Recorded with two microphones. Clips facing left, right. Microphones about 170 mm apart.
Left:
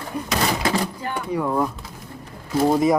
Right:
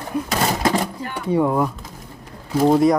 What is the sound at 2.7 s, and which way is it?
Speech, centre (ahead or behind).